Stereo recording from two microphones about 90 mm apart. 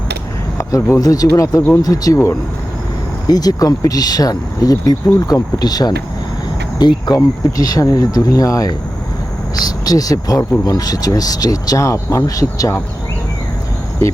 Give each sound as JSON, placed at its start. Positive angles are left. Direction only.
{"t": 0.6, "sound": "speech", "side_deg": 35}